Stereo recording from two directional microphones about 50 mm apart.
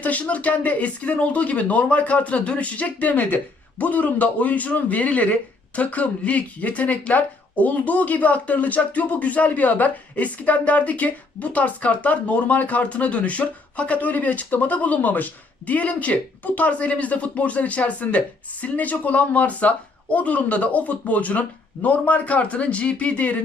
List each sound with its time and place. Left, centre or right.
0.0 s speech: left